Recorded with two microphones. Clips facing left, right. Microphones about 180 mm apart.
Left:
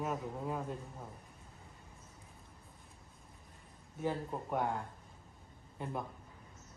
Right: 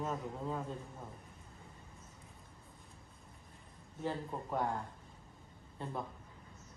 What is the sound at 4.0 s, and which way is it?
Speech, 10° left (ahead or behind).